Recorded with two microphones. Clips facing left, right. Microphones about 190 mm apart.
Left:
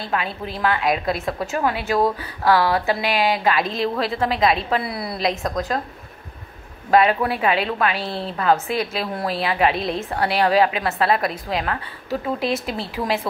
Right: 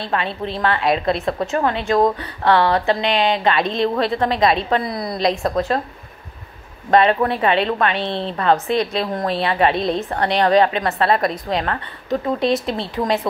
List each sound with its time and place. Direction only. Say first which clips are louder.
0.1 s a woman's voice: right 3 dB; 5° left (ahead or behind)
6.9 s a woman's voice: right 2 dB; 5° left (ahead or behind)